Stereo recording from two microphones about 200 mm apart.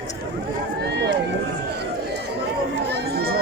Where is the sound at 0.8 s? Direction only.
60° right (ahead or behind).